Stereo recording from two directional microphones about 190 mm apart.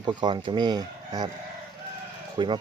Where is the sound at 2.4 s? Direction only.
25° right (ahead or behind).